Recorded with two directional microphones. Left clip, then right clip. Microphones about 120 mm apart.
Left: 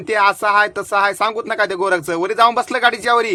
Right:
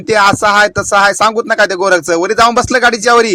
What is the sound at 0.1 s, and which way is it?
A man's voice, 45° right (ahead or behind).